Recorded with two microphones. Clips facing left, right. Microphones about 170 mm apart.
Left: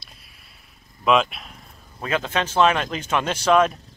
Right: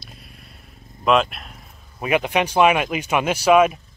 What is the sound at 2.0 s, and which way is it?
Speech, 15° right (ahead or behind).